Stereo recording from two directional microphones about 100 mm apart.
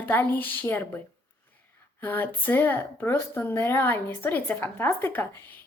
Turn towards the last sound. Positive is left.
turn(degrees=20)  # may be behind; listen again after turning